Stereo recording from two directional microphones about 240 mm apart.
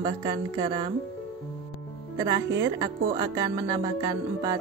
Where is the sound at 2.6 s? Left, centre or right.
Centre.